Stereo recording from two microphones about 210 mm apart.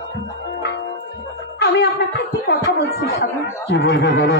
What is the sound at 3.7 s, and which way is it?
Speech, 55° left (ahead or behind).